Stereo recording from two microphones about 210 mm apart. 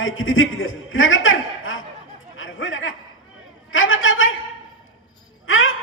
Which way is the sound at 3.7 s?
70° left (ahead or behind).